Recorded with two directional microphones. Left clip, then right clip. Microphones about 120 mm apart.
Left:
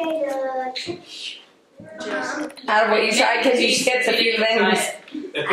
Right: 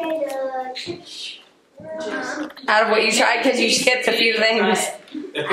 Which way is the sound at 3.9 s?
30° right (ahead or behind).